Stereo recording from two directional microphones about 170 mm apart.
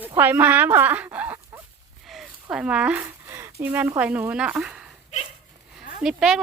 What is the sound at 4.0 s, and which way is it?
Speech, 10° right (ahead or behind).